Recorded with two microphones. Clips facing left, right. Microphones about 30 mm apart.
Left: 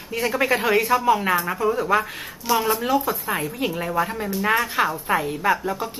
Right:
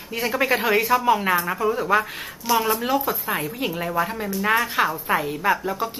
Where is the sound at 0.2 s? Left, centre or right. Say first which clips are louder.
Even; centre.